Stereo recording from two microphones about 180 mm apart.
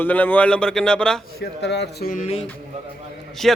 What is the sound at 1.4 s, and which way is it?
Speech, 70° left (ahead or behind).